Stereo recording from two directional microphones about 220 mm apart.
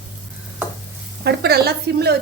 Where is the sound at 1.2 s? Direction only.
45° right (ahead or behind).